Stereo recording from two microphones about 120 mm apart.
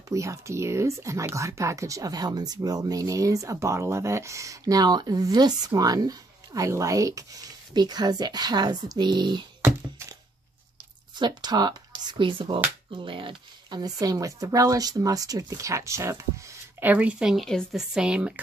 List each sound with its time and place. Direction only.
0.1 s speech: 25° right (ahead or behind)
11.1 s speech: 35° right (ahead or behind); by 18.4 s 10° right (ahead or behind)